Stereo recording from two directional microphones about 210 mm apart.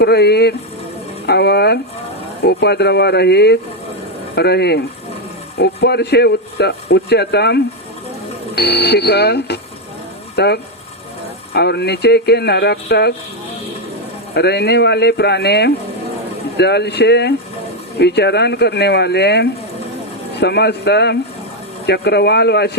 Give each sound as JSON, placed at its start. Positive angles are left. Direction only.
{"t": 0.0, "sound": "speech", "side_deg": 50}
{"t": 14.3, "sound": "speech", "side_deg": 50}